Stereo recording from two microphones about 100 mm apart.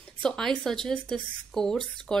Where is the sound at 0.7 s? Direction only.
5° left (ahead or behind).